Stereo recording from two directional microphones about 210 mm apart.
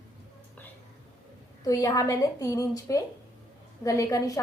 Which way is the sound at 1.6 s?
15° left (ahead or behind).